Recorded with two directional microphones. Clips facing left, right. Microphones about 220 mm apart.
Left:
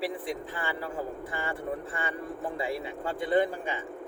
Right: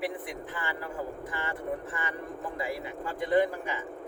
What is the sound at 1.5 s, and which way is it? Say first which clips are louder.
Speech: even; 30° left (ahead or behind).